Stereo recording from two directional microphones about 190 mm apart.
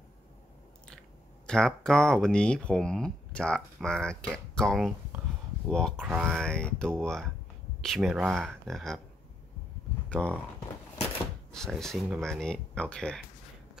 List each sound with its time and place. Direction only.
1.5 s speech: 5° left (ahead or behind)
10.0 s speech: 5° left (ahead or behind)
11.5 s speech: centre (ahead or behind)